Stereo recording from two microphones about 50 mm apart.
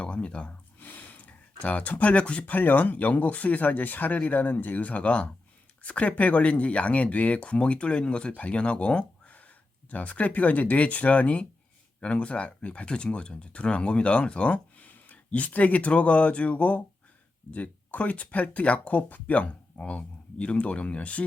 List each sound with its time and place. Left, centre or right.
0.0 s speech: left
0.8 s a sound: left
2.6 s speech: left